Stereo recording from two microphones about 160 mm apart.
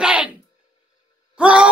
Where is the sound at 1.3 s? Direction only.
5° right (ahead or behind).